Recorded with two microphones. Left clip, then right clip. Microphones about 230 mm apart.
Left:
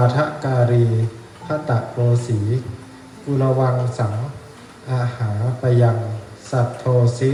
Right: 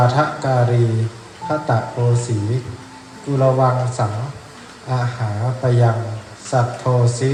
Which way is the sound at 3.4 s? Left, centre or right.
Centre.